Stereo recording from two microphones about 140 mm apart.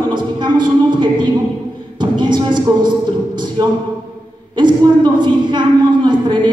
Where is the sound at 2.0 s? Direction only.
35° right (ahead or behind).